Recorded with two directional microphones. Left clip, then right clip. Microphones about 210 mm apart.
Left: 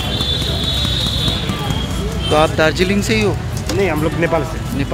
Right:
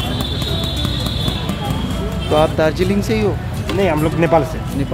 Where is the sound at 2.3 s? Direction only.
5° right (ahead or behind).